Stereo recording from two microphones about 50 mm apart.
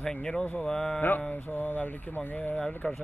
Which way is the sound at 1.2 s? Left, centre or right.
Left.